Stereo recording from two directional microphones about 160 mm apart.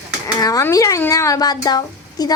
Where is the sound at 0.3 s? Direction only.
25° left (ahead or behind).